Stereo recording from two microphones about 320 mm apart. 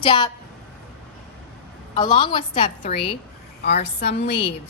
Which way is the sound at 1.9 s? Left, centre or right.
Centre.